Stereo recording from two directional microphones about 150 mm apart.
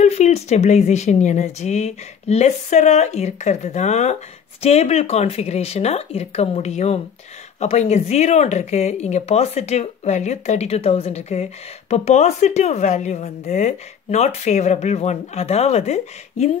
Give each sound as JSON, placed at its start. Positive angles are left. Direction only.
{"t": 0.0, "sound": "speech", "side_deg": 50}